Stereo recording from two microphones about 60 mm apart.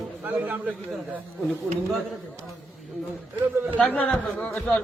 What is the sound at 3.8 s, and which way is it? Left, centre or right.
Speech, left.